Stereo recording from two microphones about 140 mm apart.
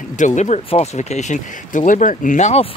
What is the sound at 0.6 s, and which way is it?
Speech, 50° left (ahead or behind).